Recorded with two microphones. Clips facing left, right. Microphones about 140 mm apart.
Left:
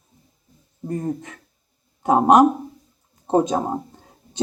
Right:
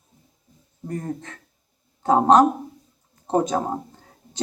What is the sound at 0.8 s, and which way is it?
Speech, 15° left (ahead or behind).